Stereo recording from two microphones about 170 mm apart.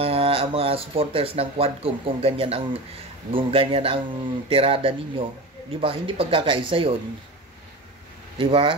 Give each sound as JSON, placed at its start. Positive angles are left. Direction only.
{"t": 0.0, "sound": "speech", "side_deg": -35}
{"t": 8.4, "sound": "speech", "side_deg": -30}